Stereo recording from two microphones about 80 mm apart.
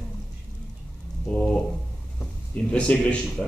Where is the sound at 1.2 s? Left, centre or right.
Centre.